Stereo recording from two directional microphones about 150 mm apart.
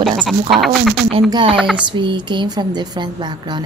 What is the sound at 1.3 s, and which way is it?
Speech, 35° right (ahead or behind).